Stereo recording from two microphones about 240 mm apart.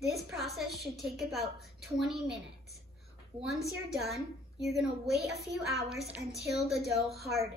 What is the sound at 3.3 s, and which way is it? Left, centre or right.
Speech, right.